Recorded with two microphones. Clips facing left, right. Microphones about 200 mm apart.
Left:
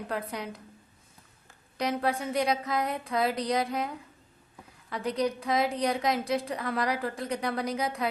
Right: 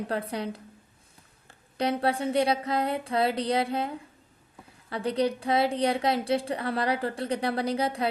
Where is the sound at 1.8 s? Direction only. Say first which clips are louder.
Right 3 dB; 30° right (ahead or behind).